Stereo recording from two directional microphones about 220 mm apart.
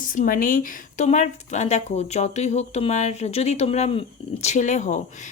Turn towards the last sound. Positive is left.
turn(degrees=35)  # may be behind; listen again after turning